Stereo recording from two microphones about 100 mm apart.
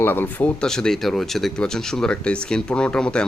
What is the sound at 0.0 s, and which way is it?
Speech, 20° left (ahead or behind).